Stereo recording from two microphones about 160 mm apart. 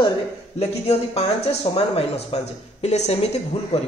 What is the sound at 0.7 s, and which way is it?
A man's voice, 40° left (ahead or behind).